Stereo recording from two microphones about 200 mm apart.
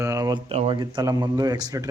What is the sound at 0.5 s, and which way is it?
Speech, 25° right (ahead or behind).